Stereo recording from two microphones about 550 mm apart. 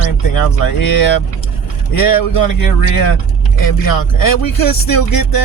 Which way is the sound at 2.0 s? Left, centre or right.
Left.